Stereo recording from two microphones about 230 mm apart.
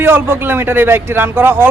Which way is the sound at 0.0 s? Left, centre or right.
Centre.